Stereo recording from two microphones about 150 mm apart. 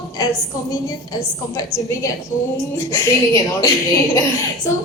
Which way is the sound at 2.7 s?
20° left (ahead or behind).